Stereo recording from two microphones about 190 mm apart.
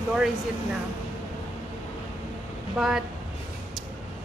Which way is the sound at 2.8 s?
Centre (ahead or behind).